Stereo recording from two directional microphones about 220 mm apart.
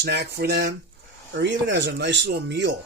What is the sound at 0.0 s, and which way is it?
Speech, 50° right (ahead or behind).